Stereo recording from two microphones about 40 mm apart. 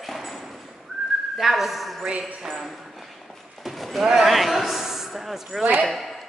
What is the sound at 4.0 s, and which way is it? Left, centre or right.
A man's voice, centre.